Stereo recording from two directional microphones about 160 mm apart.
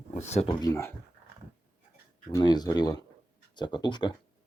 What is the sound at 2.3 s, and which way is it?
Speech, 25° left (ahead or behind).